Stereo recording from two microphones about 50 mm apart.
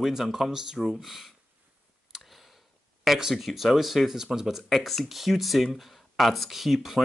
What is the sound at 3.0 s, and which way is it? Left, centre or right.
Speech, centre.